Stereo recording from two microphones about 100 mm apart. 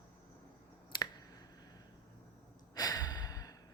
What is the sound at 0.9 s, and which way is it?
Finger snapping, 40° left (ahead or behind).